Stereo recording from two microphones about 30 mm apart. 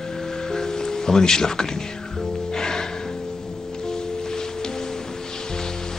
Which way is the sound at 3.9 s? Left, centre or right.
Left.